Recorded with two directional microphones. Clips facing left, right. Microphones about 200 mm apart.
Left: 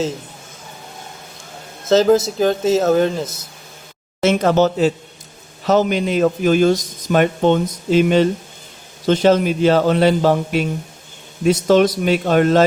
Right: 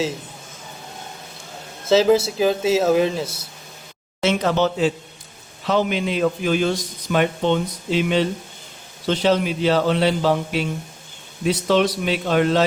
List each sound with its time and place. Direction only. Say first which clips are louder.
1.9 s speech: left 2 dB; 5° right (ahead or behind)
4.2 s a man's voice: left 5 dB; 45° left (ahead or behind)